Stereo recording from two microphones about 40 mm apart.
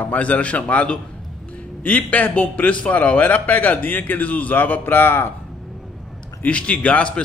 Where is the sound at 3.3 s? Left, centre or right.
Left.